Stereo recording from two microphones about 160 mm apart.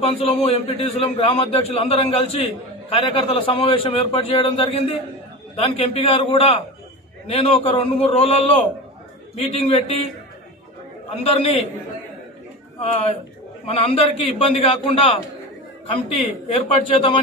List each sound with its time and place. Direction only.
0.0 s a man's voice: 35° left (ahead or behind)
11.1 s a man's voice: 40° left (ahead or behind)
12.8 s a man's voice: 45° left (ahead or behind)